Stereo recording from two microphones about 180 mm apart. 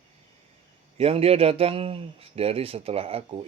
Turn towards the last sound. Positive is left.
turn(degrees=-30)  # may be behind; listen again after turning